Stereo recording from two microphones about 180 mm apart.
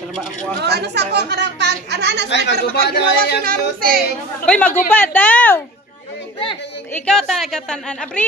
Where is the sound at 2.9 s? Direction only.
65° left (ahead or behind).